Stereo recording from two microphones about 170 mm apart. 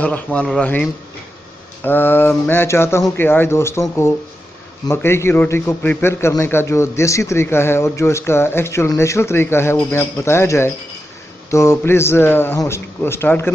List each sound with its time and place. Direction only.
0.0 s a man's voice: 10° left (ahead or behind)
4.8 s a man's voice: 15° left (ahead or behind)